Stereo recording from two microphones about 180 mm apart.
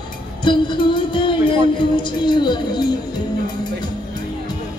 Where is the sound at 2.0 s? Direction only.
25° left (ahead or behind).